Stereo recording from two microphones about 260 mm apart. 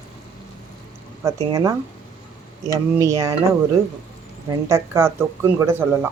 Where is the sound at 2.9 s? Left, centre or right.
Centre.